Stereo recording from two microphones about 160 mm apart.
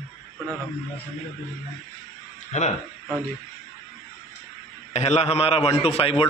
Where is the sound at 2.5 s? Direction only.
45° left (ahead or behind).